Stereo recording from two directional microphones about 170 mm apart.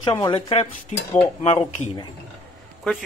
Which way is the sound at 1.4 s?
35° left (ahead or behind).